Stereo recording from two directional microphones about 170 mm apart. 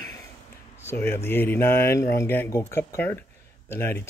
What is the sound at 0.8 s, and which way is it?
Speech, 15° left (ahead or behind).